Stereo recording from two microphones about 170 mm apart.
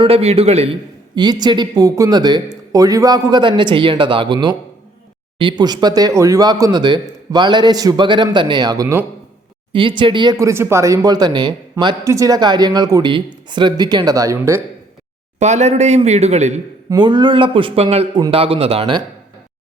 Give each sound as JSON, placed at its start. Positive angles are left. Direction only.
{"t": 0.0, "sound": "a man's voice", "side_deg": -35}
{"t": 9.7, "sound": "a man's voice", "side_deg": -30}
{"t": 15.4, "sound": "speech", "side_deg": -40}
{"t": 16.9, "sound": "speech", "side_deg": -25}